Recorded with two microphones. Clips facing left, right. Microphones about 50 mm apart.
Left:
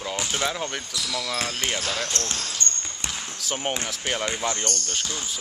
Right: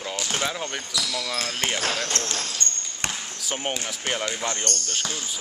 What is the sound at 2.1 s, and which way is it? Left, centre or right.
Speech, right.